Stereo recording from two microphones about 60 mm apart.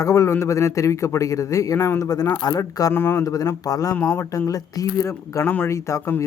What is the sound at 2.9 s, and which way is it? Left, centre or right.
Speech, left.